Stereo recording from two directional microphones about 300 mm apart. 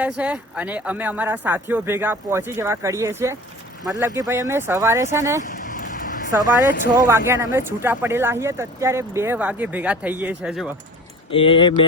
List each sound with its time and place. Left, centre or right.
0.0 s speech: centre
5.4 s vehicle: left
7.1 s speech: centre
11.3 s speech: centre